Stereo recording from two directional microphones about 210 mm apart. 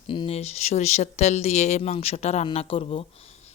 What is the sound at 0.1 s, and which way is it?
Speech, 25° left (ahead or behind).